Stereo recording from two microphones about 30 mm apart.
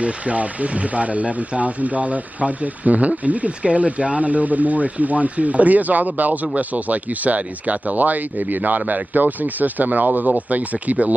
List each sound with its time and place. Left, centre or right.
0.0 s speech: right